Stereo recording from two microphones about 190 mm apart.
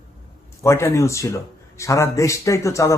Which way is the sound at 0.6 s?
15° left (ahead or behind).